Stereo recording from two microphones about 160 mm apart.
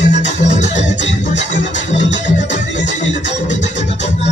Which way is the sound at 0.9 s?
50° left (ahead or behind).